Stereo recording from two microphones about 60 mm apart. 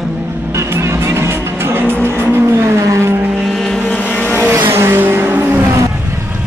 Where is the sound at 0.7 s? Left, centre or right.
Right.